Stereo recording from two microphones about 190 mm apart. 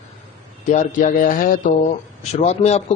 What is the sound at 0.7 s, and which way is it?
Speech, 45° left (ahead or behind).